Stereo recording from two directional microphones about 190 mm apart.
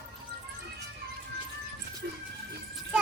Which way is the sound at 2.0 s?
60° right (ahead or behind).